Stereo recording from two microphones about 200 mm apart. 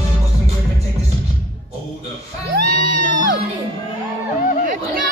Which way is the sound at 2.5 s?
45° right (ahead or behind).